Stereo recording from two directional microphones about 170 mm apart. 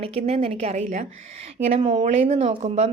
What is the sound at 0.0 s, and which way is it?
Speech, 35° right (ahead or behind).